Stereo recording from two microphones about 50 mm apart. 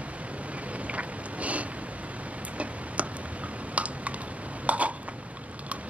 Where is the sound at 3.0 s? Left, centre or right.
Right.